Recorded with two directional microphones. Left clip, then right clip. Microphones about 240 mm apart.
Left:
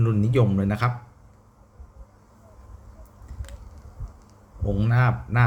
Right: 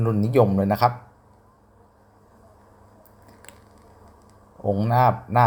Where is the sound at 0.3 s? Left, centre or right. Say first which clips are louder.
Right 7 dB; centre.